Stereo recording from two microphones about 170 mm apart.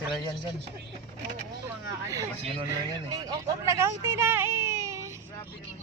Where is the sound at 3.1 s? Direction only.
25° right (ahead or behind).